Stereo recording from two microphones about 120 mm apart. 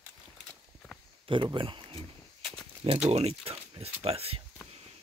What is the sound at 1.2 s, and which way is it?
Speech, 45° right (ahead or behind).